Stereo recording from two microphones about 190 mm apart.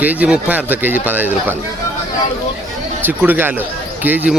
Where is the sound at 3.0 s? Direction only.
10° right (ahead or behind).